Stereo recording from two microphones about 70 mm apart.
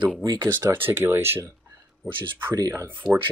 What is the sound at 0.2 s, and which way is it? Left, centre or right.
Speech, right.